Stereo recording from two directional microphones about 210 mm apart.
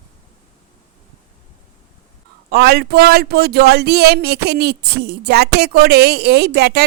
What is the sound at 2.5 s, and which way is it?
Speech, 50° right (ahead or behind).